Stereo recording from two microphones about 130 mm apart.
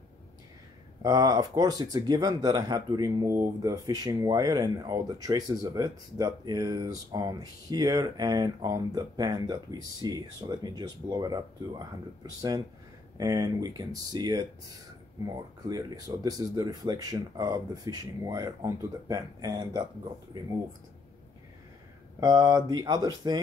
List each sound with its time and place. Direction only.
1.0 s speech: 30° right (ahead or behind)
22.2 s speech: 30° right (ahead or behind)